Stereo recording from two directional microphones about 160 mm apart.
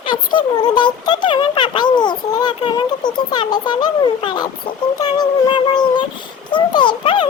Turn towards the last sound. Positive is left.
turn(degrees=30)  # may be behind; listen again after turning